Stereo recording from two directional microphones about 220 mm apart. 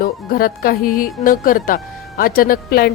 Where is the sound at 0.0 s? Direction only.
40° left (ahead or behind).